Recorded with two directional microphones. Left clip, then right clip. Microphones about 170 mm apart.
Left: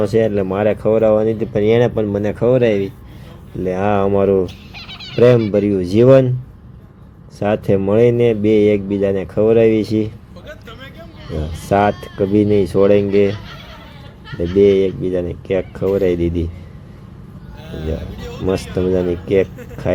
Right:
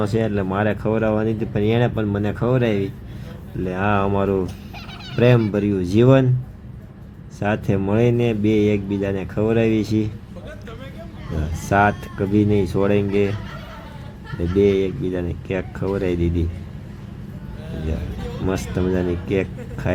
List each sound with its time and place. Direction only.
0.0 s speech: 20° left (ahead or behind)
4.4 s fowl: 50° right (ahead or behind)
5.2 s speech: 20° left (ahead or behind)
7.3 s speech: 20° left (ahead or behind)
11.3 s speech: 20° left (ahead or behind)
14.6 s speech: 20° left (ahead or behind)
18.5 s speech: 15° left (ahead or behind)